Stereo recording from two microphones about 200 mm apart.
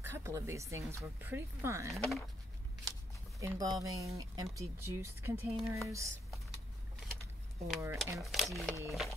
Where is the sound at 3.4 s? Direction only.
15° right (ahead or behind).